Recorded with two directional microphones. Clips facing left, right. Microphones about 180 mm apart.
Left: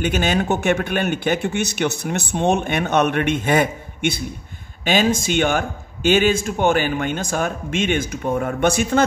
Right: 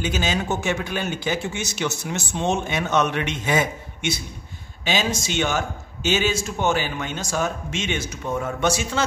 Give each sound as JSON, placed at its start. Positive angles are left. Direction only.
{"t": 0.0, "sound": "a man's voice", "side_deg": 60}